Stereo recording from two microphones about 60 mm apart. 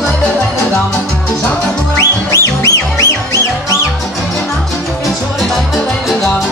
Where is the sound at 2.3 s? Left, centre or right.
Left.